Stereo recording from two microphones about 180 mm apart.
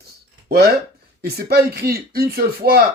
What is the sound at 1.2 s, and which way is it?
Speech, 60° right (ahead or behind).